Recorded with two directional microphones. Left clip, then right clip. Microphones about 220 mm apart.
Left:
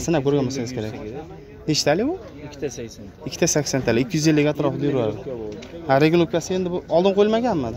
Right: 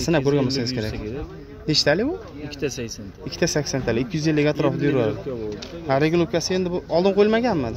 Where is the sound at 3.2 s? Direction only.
10° left (ahead or behind).